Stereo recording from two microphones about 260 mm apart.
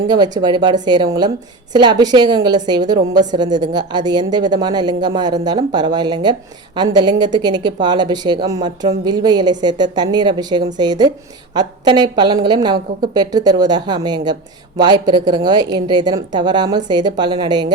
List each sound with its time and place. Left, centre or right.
0.1 s speech: centre